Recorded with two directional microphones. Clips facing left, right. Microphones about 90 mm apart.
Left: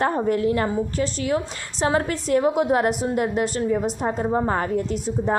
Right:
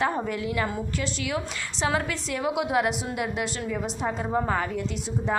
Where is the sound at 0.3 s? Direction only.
40° left (ahead or behind).